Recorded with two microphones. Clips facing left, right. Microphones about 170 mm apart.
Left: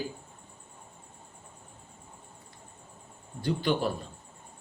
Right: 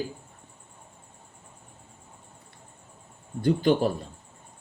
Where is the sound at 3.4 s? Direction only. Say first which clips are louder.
Right 6 dB; 40° right (ahead or behind).